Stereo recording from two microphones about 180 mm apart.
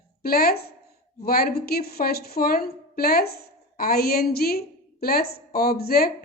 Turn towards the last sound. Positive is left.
turn(degrees=55)  # may be behind; listen again after turning